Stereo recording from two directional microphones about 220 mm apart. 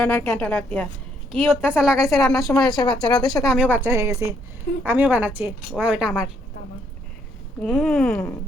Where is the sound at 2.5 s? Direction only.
15° left (ahead or behind).